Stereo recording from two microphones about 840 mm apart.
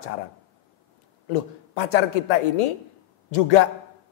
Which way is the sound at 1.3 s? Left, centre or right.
Left.